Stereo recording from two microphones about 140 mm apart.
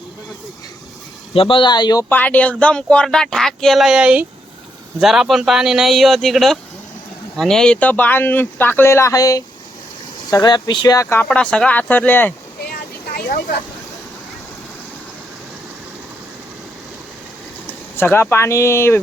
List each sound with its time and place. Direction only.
1.3 s speech: 40° left (ahead or behind)
2.0 s speech: 10° left (ahead or behind)
11.3 s speech: 5° left (ahead or behind)
13.1 s speech: 90° left
17.9 s speech: 15° left (ahead or behind)